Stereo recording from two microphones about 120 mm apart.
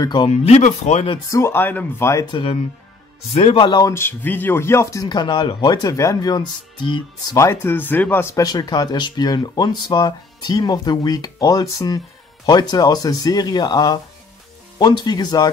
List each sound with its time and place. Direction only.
0.0 s speech: 40° left (ahead or behind)
0.3 s speech: 65° left (ahead or behind)
1.3 s speech: 20° left (ahead or behind)
2.3 s speech: 50° left (ahead or behind)
3.8 s speech: 20° left (ahead or behind)
5.0 s speech: 35° left (ahead or behind)
7.3 s speech: 20° left (ahead or behind)